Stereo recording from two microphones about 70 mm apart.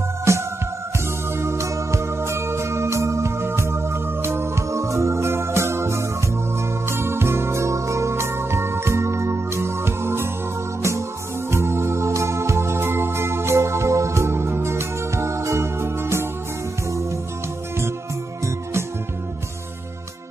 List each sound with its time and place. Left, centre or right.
0.3 s music: right
18.4 s music: right